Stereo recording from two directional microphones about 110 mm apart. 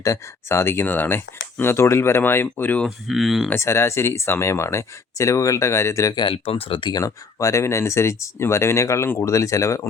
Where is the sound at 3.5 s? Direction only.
25° left (ahead or behind).